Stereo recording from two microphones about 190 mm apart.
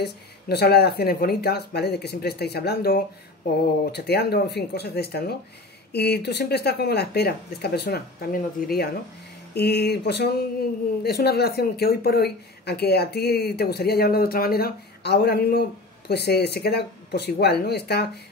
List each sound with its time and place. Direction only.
0.0 s speech: 60° left (ahead or behind)